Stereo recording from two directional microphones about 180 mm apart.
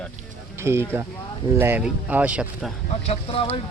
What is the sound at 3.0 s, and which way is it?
Speech, 35° left (ahead or behind).